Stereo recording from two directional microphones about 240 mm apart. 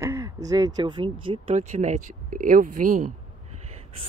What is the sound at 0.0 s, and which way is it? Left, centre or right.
Speech, centre.